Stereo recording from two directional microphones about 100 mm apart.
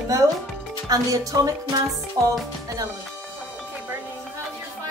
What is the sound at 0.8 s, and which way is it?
A woman's voice, 35° right (ahead or behind).